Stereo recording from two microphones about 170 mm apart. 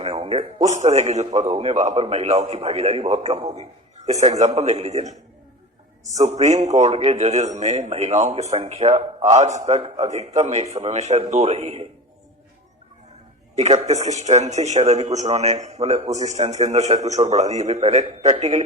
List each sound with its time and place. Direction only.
0.0 s a man's voice: 35° right (ahead or behind)
6.1 s a man's voice: 45° right (ahead or behind)
13.6 s a man's voice: 40° right (ahead or behind)